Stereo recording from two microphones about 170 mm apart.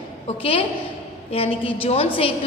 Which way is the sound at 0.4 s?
30° left (ahead or behind).